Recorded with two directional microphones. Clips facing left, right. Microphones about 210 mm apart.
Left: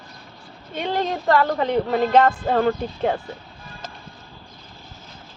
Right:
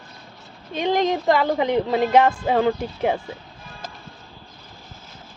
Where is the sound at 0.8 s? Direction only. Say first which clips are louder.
Right 4 dB; 15° right (ahead or behind).